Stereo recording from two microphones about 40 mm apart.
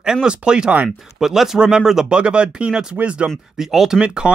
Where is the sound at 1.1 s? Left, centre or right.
Centre.